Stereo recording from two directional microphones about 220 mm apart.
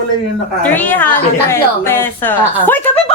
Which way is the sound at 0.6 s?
5° left (ahead or behind).